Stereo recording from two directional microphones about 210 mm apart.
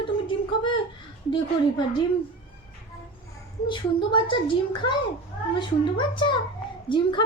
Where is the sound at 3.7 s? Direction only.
25° left (ahead or behind).